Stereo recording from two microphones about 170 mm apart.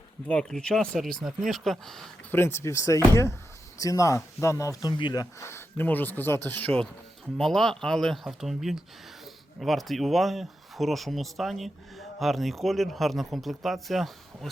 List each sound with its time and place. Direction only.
0.3 s speech: 5° left (ahead or behind)
2.3 s speech: 15° left (ahead or behind)